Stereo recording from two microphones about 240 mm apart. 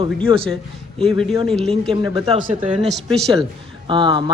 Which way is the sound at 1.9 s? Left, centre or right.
Centre.